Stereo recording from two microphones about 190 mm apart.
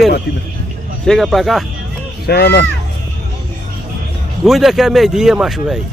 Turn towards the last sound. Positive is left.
turn(degrees=0)  # may be behind; listen again after turning